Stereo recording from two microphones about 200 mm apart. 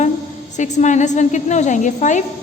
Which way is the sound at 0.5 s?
35° left (ahead or behind).